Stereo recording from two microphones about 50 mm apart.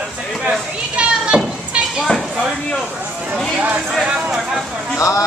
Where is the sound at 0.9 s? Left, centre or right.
Right.